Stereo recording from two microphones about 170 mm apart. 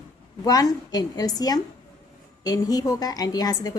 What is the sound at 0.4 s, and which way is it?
A woman's voice, 20° left (ahead or behind).